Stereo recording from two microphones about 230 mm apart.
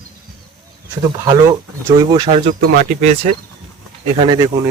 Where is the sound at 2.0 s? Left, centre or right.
Centre.